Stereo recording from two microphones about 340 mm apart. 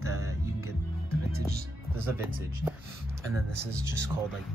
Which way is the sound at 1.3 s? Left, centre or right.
Right.